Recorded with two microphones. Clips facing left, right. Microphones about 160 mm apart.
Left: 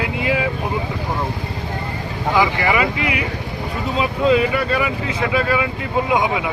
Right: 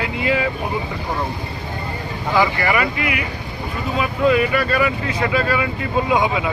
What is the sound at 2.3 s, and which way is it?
Speech, 15° left (ahead or behind).